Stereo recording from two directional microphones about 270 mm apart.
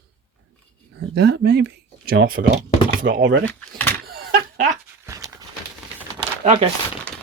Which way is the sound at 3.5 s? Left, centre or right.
Centre.